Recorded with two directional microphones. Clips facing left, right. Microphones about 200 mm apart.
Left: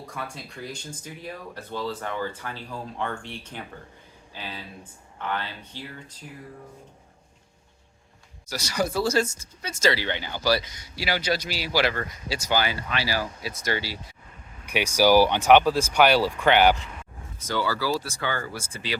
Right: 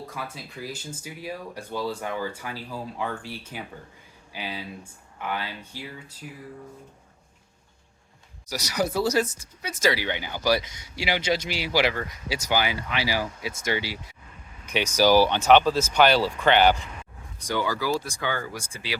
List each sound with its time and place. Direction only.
0.1 s speech: centre (ahead or behind)
8.4 s speech: 15° right (ahead or behind)
14.9 s speech: 15° left (ahead or behind)
17.4 s speech: 15° right (ahead or behind)